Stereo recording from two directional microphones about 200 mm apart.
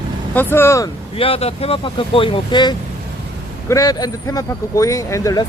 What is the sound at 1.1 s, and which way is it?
Speech, 30° left (ahead or behind).